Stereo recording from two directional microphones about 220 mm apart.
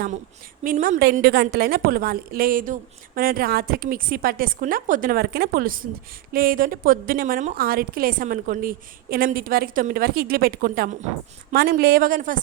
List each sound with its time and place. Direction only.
0.6 s a woman's voice: 40° right (ahead or behind)